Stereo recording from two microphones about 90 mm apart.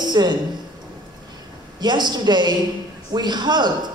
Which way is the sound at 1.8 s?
55° right (ahead or behind).